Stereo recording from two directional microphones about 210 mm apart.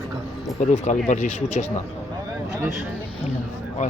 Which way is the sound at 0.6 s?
35° left (ahead or behind).